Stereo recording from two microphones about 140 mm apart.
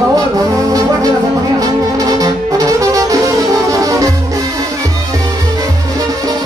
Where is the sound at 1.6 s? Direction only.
25° right (ahead or behind).